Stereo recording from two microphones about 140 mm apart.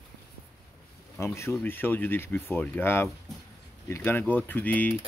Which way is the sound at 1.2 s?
20° left (ahead or behind).